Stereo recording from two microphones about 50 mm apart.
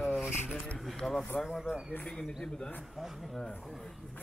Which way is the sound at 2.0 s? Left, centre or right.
Centre.